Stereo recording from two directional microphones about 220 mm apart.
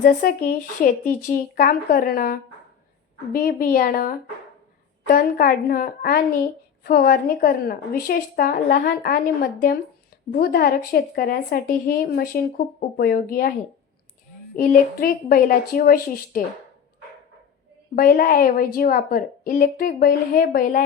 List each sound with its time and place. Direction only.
0.0 s speech: 40° left (ahead or behind)
17.9 s speech: 40° left (ahead or behind)